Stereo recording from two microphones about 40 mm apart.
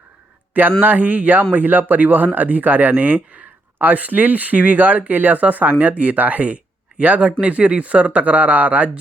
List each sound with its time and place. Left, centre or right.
0.8 s speech: right